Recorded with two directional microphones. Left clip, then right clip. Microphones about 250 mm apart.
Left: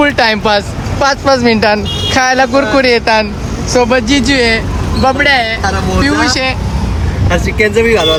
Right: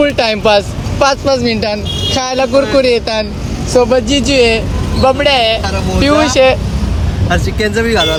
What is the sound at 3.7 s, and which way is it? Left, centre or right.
Speech, centre.